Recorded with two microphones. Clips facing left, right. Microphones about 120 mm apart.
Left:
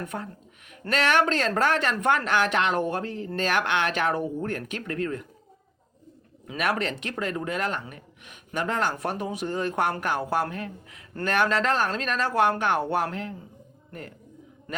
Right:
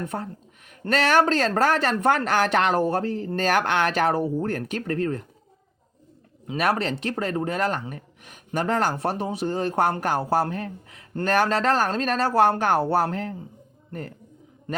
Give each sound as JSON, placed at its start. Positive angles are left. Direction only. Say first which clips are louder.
{"t": 0.0, "sound": "speech", "louder": "right 3 dB", "side_deg": -35}
{"t": 6.6, "sound": "speech", "louder": "right 3 dB", "side_deg": -35}